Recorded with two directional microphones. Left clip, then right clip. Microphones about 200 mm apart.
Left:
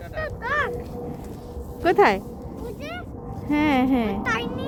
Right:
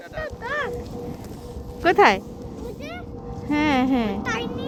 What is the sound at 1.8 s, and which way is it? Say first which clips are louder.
Speech: right 2 dB; 5° left (ahead or behind).